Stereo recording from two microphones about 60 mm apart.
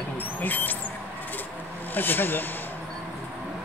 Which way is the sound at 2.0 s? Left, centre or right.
Left.